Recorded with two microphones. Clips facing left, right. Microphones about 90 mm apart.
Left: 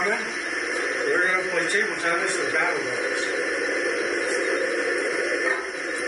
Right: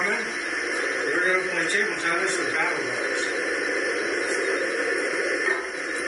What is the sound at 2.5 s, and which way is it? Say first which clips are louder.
Speech: left 2 dB; 25° left (ahead or behind).